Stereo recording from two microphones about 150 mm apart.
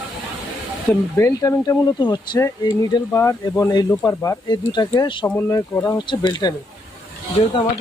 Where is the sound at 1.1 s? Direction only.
20° left (ahead or behind).